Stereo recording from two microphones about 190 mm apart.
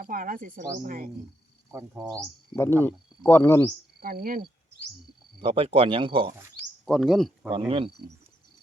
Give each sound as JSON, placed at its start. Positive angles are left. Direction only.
{"t": 0.0, "sound": "speech", "side_deg": -45}
{"t": 2.6, "sound": "speech", "side_deg": 10}
{"t": 4.0, "sound": "speech", "side_deg": -50}
{"t": 5.4, "sound": "speech", "side_deg": -30}
{"t": 6.8, "sound": "speech", "side_deg": 0}